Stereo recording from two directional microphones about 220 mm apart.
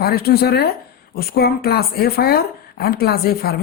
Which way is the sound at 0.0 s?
45° left (ahead or behind).